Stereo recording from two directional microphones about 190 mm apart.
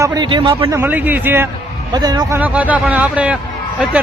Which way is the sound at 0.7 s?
10° right (ahead or behind).